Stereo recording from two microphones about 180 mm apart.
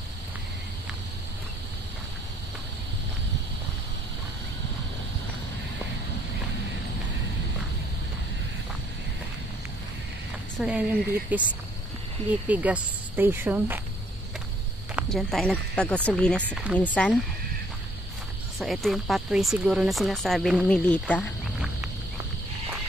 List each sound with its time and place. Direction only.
10.6 s speech: centre (ahead or behind)
15.0 s speech: centre (ahead or behind)
16.3 s speech: 10° right (ahead or behind)
16.7 s speech: 5° left (ahead or behind)
18.6 s speech: centre (ahead or behind)